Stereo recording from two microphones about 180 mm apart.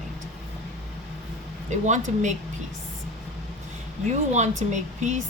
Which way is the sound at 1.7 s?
40° right (ahead or behind).